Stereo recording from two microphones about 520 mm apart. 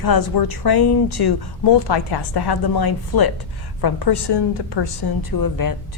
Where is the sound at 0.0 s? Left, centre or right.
Left.